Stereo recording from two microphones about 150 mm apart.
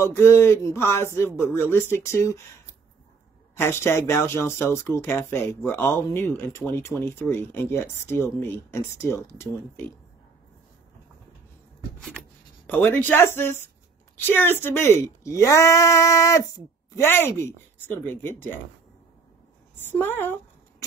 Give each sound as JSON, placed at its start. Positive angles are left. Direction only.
{"t": 0.0, "sound": "speech", "side_deg": 15}
{"t": 3.5, "sound": "speech", "side_deg": 15}
{"t": 12.6, "sound": "speech", "side_deg": 10}
{"t": 19.8, "sound": "speech", "side_deg": 15}